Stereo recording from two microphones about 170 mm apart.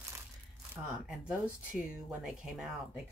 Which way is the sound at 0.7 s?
5° right (ahead or behind).